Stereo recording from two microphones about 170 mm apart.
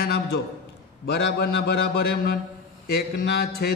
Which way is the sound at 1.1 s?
75° left (ahead or behind).